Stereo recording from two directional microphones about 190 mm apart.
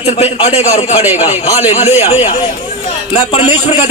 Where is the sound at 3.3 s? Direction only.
30° left (ahead or behind).